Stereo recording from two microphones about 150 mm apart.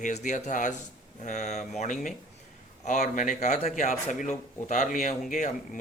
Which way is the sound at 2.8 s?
55° left (ahead or behind).